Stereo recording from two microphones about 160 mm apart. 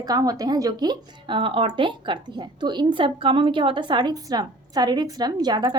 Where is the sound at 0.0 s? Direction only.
25° right (ahead or behind).